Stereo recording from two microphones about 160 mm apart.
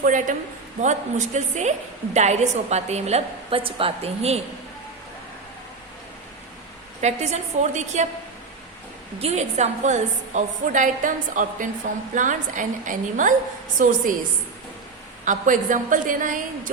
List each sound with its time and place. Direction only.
0.0 s a woman's voice: 55° right (ahead or behind)
7.0 s a woman's voice: 45° right (ahead or behind)
9.1 s a woman's voice: 40° right (ahead or behind); by 13.9 s 55° right (ahead or behind)
15.2 s a woman's voice: 55° right (ahead or behind)